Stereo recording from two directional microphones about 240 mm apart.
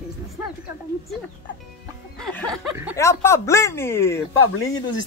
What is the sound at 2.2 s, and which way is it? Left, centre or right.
Music, centre.